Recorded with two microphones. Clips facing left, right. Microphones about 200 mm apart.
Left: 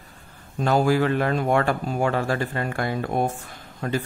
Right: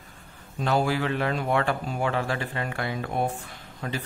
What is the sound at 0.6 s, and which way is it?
Speech, 45° left (ahead or behind).